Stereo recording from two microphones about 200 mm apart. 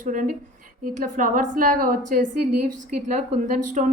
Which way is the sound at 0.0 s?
40° right (ahead or behind).